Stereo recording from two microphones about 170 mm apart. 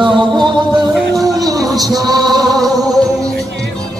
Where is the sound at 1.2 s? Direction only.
20° right (ahead or behind).